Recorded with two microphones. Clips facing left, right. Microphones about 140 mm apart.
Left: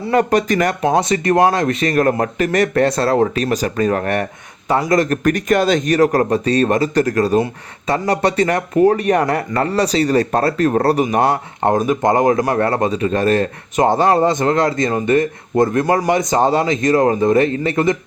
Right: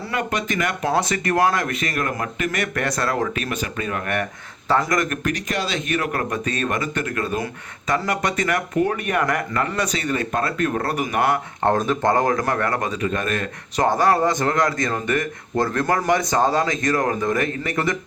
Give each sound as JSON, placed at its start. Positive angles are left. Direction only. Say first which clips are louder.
{"t": 0.1, "sound": "speech", "louder": "left 10 dB", "side_deg": 40}
{"t": 0.8, "sound": "speech", "louder": "left 6 dB", "side_deg": 20}
{"t": 5.3, "sound": "speech", "louder": "left 10 dB", "side_deg": 50}
{"t": 11.6, "sound": "speech", "louder": "left 4 dB", "side_deg": 15}
{"t": 12.5, "sound": "speech", "louder": "left 7 dB", "side_deg": 30}
{"t": 13.7, "sound": "speech", "louder": "left 4 dB", "side_deg": 20}